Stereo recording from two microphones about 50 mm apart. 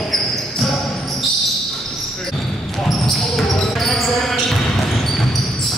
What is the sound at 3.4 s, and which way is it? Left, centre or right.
Basketball bounce, centre.